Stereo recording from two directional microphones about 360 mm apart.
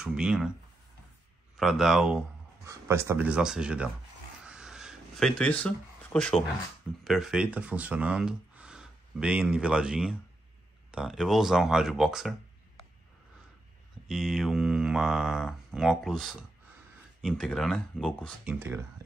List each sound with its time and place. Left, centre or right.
0.0 s speech: centre
1.6 s speech: centre
4.5 s a sound: centre
7.1 s speech: centre
14.0 s speech: centre